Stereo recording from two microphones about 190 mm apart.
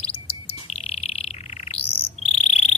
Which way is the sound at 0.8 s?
35° left (ahead or behind).